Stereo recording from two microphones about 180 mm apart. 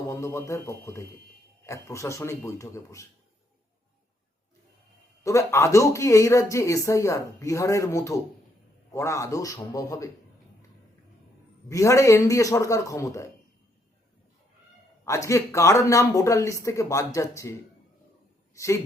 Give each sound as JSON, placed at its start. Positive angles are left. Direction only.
{"t": 0.1, "sound": "speech", "side_deg": 15}
{"t": 5.2, "sound": "speech", "side_deg": 15}
{"t": 11.7, "sound": "speech", "side_deg": 15}
{"t": 15.0, "sound": "speech", "side_deg": 15}
{"t": 18.5, "sound": "speech", "side_deg": 15}